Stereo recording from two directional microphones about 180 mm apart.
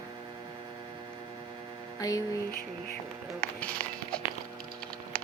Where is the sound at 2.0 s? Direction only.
20° left (ahead or behind).